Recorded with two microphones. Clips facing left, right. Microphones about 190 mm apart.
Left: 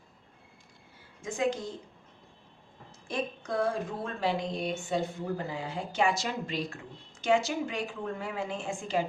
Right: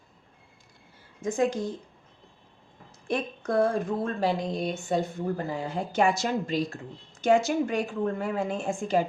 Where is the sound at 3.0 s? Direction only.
55° right (ahead or behind).